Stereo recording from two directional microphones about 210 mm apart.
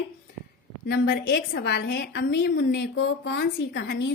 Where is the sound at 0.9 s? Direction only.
50° left (ahead or behind).